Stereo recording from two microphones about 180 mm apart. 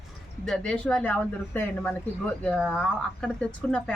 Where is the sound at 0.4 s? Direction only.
5° left (ahead or behind).